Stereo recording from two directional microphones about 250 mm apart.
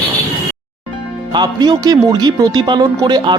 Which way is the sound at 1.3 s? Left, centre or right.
Centre.